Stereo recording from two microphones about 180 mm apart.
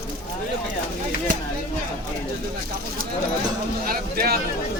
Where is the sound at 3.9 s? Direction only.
55° right (ahead or behind).